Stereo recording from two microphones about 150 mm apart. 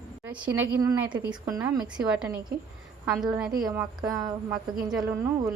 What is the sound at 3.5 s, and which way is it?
Speech, 25° right (ahead or behind).